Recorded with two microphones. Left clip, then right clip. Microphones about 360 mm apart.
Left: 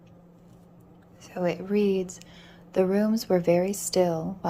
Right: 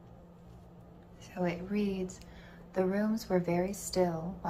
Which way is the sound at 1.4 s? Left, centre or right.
Centre.